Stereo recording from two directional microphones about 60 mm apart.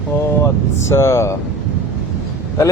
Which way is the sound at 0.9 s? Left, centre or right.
Left.